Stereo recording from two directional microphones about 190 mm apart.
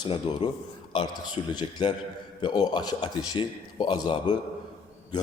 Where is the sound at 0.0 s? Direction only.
20° left (ahead or behind).